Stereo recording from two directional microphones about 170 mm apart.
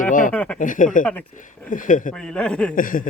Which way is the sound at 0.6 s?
50° left (ahead or behind).